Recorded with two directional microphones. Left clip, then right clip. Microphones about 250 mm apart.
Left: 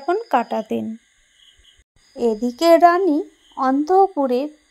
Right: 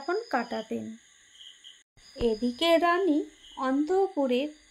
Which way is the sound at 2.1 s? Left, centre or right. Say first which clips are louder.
Left 7 dB; left.